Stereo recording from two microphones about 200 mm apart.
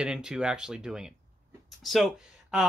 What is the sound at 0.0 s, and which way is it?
Speech, 5° right (ahead or behind).